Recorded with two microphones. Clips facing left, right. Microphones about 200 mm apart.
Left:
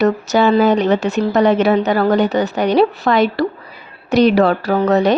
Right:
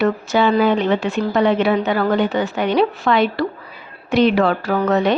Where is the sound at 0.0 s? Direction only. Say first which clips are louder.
Left 3 dB; 40° left (ahead or behind).